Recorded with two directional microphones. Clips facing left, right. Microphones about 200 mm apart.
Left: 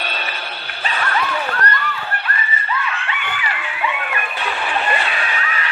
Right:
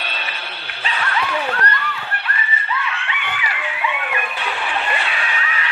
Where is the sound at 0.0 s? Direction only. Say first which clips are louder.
Left 3 dB; 45° left (ahead or behind).